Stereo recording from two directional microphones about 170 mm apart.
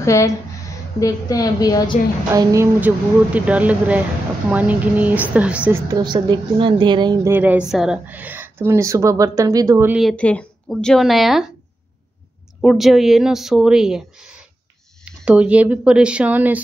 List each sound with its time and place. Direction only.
0.0 s a woman's voice: 20° left (ahead or behind)
2.3 s a woman's voice: 15° right (ahead or behind)
5.9 s a woman's voice: 25° right (ahead or behind)
7.2 s a woman's voice: 10° right (ahead or behind)
9.9 s a woman's voice: 5° left (ahead or behind)
12.6 s a woman's voice: centre (ahead or behind)
15.0 s a woman's voice: 5° right (ahead or behind)